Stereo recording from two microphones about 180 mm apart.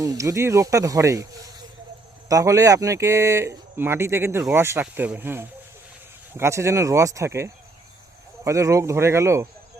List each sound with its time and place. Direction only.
0.0 s speech: 20° right (ahead or behind)